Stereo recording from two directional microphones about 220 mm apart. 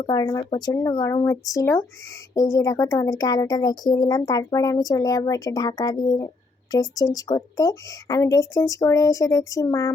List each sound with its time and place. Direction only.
0.0 s speech: 15° left (ahead or behind)